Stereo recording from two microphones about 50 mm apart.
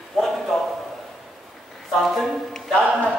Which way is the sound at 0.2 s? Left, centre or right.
Centre.